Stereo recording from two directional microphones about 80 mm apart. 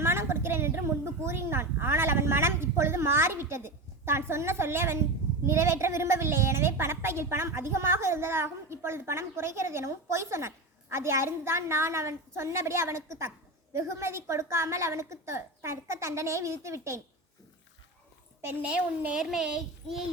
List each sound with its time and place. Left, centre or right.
0.0 s a woman's voice: right
18.4 s a child's voice: centre